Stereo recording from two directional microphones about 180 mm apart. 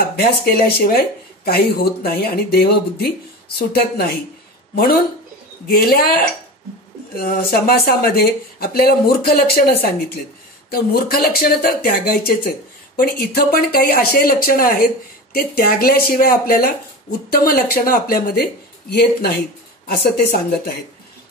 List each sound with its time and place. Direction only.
0.1 s speech: 60° left (ahead or behind)